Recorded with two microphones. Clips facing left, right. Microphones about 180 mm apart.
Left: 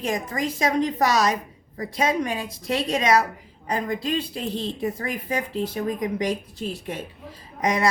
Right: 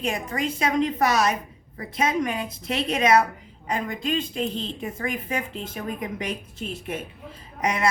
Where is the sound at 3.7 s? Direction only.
35° left (ahead or behind).